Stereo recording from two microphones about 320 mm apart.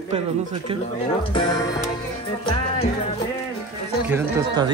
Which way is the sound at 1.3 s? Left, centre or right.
Centre.